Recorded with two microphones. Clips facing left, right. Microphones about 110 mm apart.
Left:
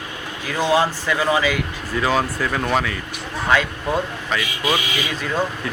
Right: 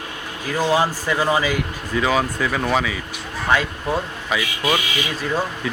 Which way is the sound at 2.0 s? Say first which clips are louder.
Even; centre (ahead or behind).